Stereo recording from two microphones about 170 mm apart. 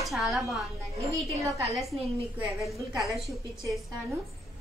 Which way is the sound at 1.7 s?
Centre (ahead or behind).